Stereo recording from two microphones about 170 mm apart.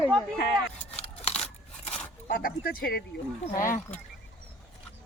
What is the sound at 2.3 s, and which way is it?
Speech, 55° left (ahead or behind).